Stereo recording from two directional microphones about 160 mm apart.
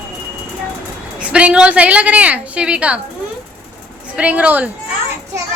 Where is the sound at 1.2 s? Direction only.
5° right (ahead or behind).